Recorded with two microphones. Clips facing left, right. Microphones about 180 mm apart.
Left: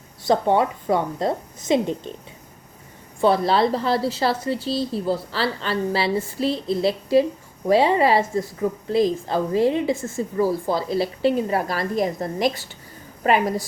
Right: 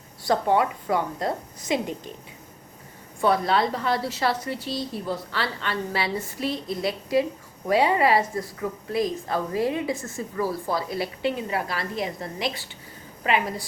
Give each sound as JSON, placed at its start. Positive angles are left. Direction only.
{"t": 0.3, "sound": "a woman's voice", "side_deg": 25}
{"t": 3.2, "sound": "a woman's voice", "side_deg": 30}